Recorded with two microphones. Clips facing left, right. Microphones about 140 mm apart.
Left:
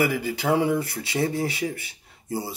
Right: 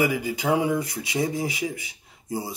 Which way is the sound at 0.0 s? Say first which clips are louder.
Even; 15° right (ahead or behind).